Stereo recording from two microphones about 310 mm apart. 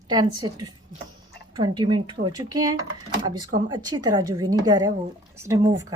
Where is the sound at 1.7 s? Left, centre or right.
Centre.